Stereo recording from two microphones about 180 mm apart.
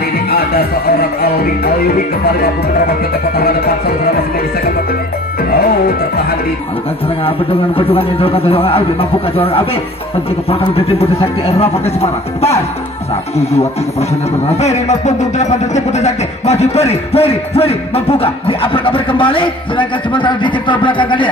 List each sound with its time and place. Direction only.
0.3 s music: 60° left (ahead or behind)
3.3 s music: 60° left (ahead or behind)
7.2 s speech: 30° left (ahead or behind)